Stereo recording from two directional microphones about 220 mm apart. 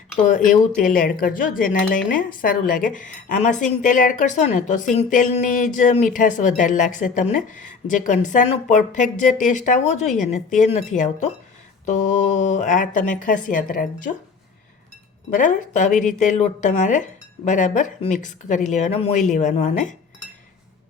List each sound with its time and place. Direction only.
0.3 s a woman's voice: 35° left (ahead or behind)
15.3 s a woman's voice: 35° left (ahead or behind)